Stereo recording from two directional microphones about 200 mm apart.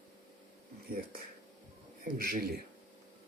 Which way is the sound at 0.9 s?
45° right (ahead or behind).